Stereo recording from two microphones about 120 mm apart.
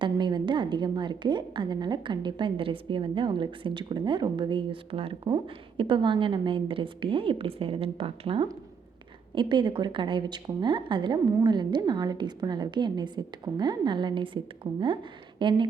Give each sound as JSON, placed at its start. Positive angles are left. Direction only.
{"t": 0.0, "sound": "a woman's voice", "side_deg": -40}